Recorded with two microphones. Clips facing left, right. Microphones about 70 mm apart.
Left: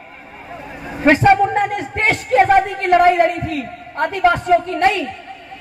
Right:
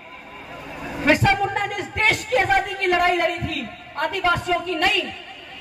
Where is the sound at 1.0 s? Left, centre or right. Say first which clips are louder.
Left 7 dB; left.